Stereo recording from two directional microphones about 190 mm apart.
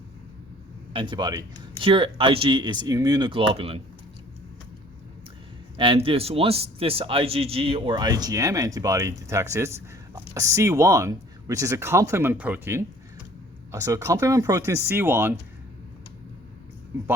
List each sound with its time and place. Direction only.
0.9 s a man's voice: 25° right (ahead or behind)
5.7 s a man's voice: 25° right (ahead or behind)